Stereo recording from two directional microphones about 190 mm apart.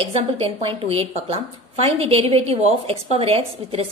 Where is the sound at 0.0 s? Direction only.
30° right (ahead or behind).